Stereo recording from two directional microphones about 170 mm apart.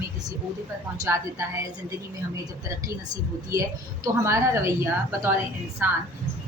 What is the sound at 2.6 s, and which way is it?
A woman's voice, 20° right (ahead or behind).